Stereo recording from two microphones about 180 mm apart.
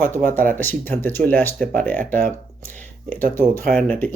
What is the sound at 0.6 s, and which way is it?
Speech, 10° left (ahead or behind).